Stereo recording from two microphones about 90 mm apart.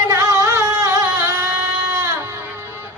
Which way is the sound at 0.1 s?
35° right (ahead or behind).